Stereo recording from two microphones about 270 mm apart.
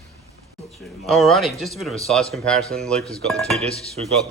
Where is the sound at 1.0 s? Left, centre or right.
Centre.